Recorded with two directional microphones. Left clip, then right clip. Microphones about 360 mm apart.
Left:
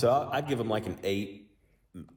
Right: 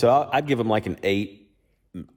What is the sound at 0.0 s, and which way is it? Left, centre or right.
A man's voice, right.